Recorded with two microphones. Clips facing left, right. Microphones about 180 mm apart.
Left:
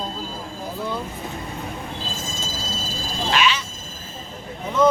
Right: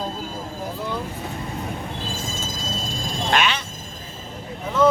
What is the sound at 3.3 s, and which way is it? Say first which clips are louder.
Frog: even; 55° right (ahead or behind).